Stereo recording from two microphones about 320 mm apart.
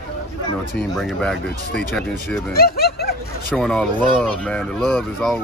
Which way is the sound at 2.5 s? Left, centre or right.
Left.